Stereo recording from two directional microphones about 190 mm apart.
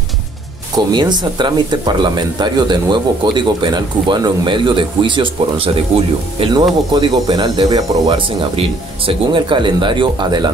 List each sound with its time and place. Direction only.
0.7 s speech: 20° right (ahead or behind)